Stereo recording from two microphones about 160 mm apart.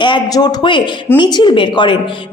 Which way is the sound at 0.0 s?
30° left (ahead or behind).